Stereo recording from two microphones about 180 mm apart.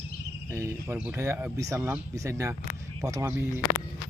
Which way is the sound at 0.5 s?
15° right (ahead or behind).